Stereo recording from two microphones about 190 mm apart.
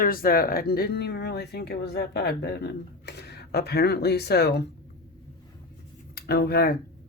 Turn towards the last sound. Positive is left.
turn(degrees=55)  # may be behind; listen again after turning